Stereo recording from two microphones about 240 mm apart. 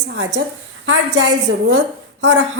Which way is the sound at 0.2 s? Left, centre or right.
Right.